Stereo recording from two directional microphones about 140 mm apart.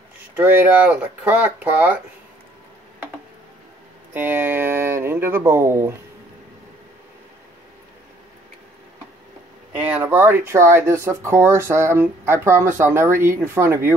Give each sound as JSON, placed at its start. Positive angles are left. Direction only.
{"t": 0.4, "sound": "speech", "side_deg": -10}
{"t": 4.1, "sound": "speech", "side_deg": -15}
{"t": 9.8, "sound": "speech", "side_deg": -10}